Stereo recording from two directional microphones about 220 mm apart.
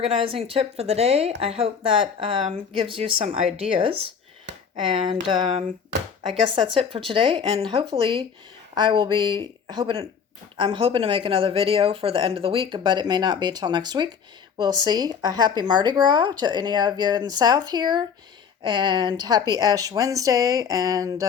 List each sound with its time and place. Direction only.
0.0 s speech: 25° right (ahead or behind)